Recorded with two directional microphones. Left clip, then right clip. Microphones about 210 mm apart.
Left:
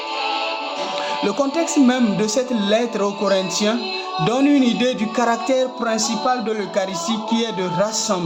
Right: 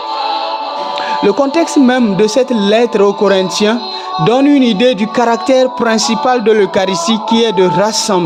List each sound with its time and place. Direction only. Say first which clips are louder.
1.2 s speech: right 10 dB; 35° right (ahead or behind)